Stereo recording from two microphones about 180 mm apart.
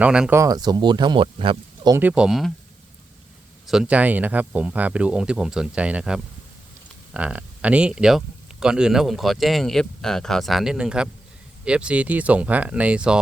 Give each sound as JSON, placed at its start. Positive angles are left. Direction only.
{"t": 0.0, "sound": "speech", "side_deg": -5}
{"t": 2.0, "sound": "speech", "side_deg": -10}
{"t": 3.7, "sound": "speech", "side_deg": -5}